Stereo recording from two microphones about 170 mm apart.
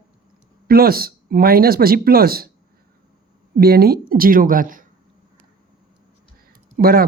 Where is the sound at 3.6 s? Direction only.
65° right (ahead or behind).